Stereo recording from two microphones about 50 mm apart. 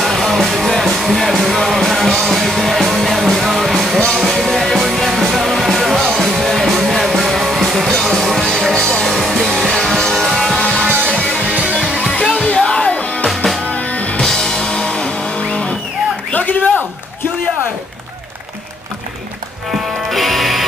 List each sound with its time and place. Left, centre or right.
0.1 s music: centre
9.1 s music: centre
10.6 s music: centre
14.2 s music: centre
16.3 s a sound: left
19.7 s music: centre